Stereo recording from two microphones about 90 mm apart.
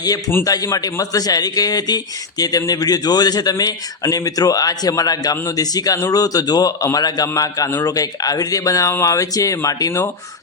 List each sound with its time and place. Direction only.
0.4 s a man's voice: 40° left (ahead or behind)